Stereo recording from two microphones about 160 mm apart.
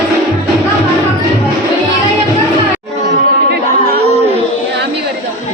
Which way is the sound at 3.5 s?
80° right.